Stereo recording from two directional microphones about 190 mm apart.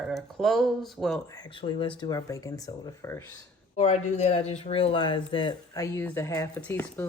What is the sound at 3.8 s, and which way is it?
A woman's voice, 35° left (ahead or behind).